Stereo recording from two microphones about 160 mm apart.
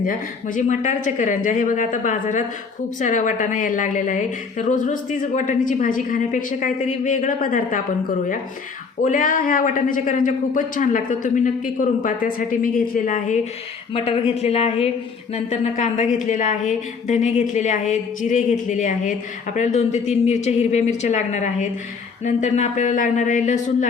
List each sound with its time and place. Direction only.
0.0 s a woman's voice: 55° left (ahead or behind)
9.0 s a man's voice: 55° left (ahead or behind)
13.9 s a woman's voice: 35° left (ahead or behind)